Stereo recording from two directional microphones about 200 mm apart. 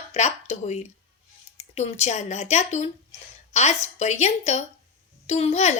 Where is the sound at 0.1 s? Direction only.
35° left (ahead or behind).